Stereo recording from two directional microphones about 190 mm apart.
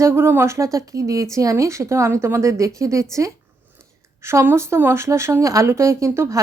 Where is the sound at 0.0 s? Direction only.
15° right (ahead or behind).